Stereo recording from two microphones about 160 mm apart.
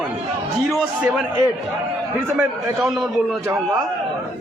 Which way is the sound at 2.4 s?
5° right (ahead or behind).